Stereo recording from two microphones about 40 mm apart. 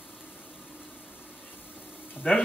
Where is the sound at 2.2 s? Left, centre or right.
Left.